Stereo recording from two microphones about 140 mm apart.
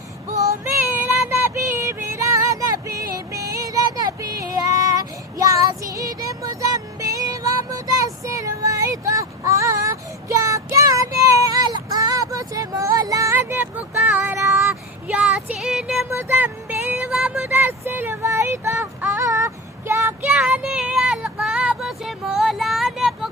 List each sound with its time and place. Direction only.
0.3 s child singing: 20° right (ahead or behind); by 16.0 s 5° right (ahead or behind)
16.0 s a sound: 15° right (ahead or behind)
20.3 s child singing: 5° right (ahead or behind)